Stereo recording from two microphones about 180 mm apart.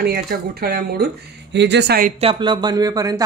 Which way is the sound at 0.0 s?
65° right (ahead or behind).